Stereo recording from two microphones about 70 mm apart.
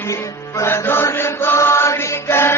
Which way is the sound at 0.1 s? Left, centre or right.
Left.